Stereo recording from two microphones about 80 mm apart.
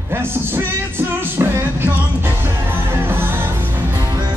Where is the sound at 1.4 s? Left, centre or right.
Right.